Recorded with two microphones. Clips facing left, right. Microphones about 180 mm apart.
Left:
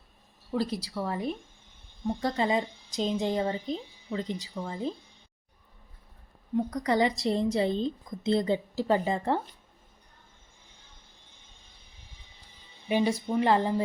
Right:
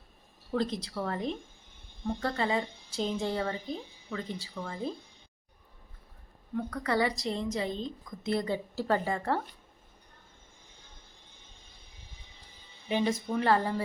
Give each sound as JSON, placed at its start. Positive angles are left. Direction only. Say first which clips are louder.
{"t": 0.5, "sound": "a woman's voice", "louder": "left 1 dB", "side_deg": 10}
{"t": 6.6, "sound": "a woman's voice", "louder": "left 4 dB", "side_deg": 15}
{"t": 7.3, "sound": "a woman's voice", "louder": "left 6 dB", "side_deg": 35}
{"t": 12.9, "sound": "a woman's voice", "louder": "left 3 dB", "side_deg": 10}